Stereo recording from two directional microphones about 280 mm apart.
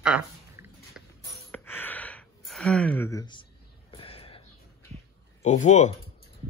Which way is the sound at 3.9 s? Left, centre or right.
Centre.